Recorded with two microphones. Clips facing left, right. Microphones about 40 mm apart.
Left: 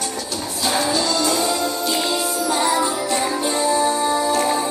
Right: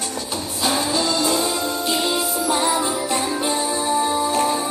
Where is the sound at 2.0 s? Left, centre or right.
Centre.